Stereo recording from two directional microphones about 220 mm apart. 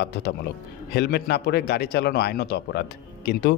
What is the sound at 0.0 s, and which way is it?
A man's voice, 50° left (ahead or behind).